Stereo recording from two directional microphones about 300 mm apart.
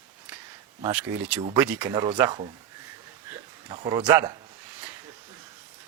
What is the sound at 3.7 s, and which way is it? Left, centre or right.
Speech, centre.